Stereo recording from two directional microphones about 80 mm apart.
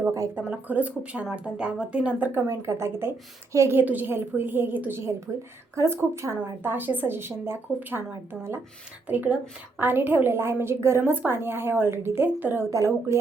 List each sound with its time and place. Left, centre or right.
0.3 s speech: right
2.5 s a woman's voice: right
3.8 s a woman's voice: right
6.6 s a woman's voice: right
12.7 s a woman's voice: right